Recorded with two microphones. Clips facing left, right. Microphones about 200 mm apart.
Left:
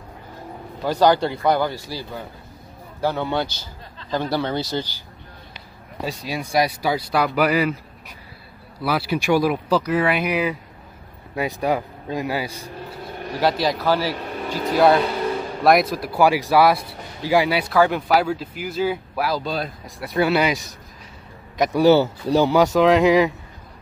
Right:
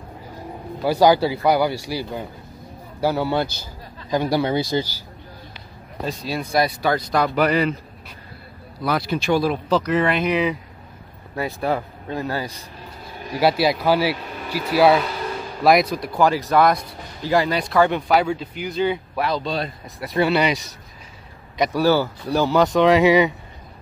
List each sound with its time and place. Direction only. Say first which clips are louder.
0.8 s speech: right 2 dB; 10° right (ahead or behind)
6.0 s speech: right 1 dB; 15° left (ahead or behind)
8.8 s speech: even; 5° left (ahead or behind)
13.4 s speech: right 2 dB; 10° right (ahead or behind)
21.7 s speech: left 4 dB; 20° left (ahead or behind)
22.5 s speech: right 2 dB; 10° left (ahead or behind)